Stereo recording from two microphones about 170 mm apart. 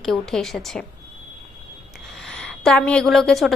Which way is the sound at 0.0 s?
Centre (ahead or behind).